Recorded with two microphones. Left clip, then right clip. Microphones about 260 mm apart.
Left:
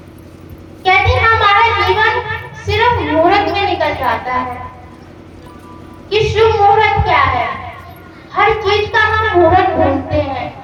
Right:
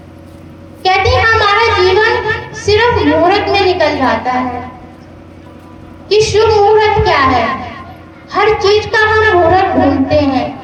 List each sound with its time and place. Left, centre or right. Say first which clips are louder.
0.8 s a sound: right 1 dB; right
3.2 s a woman's voice: right 2 dB; right
6.1 s a woman's voice: right 3 dB; right